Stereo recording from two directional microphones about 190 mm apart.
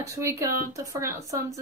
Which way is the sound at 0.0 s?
15° right (ahead or behind).